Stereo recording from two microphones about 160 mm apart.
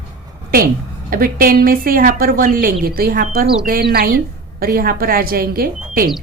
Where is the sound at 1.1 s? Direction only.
65° right (ahead or behind).